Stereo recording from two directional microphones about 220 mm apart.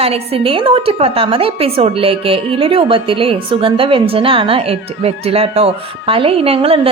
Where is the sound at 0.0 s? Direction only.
25° right (ahead or behind).